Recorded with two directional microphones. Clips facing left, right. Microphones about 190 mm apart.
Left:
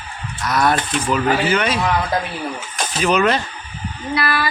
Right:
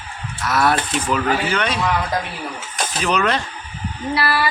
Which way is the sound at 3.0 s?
5° left (ahead or behind).